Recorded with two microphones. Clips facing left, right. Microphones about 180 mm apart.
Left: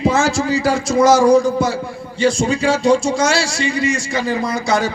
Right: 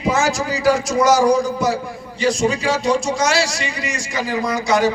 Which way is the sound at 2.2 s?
30° left (ahead or behind).